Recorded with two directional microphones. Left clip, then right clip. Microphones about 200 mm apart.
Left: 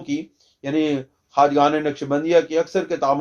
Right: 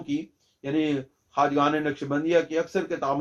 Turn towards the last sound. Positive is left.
turn(degrees=40)  # may be behind; listen again after turning